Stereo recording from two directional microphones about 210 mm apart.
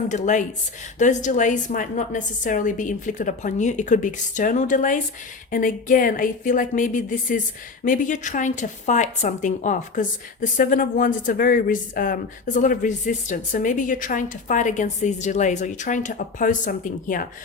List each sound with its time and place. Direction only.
0.1 s a woman's voice: 35° left (ahead or behind)